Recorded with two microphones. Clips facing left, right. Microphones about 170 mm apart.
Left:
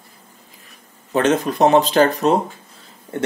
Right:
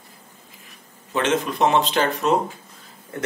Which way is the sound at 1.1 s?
40° left (ahead or behind).